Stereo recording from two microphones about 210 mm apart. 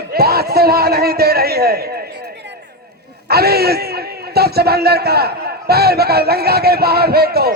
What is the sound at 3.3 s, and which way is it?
A man's voice, 50° right (ahead or behind).